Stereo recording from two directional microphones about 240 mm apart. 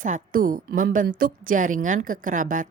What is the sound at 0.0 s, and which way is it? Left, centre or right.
A woman's voice, right.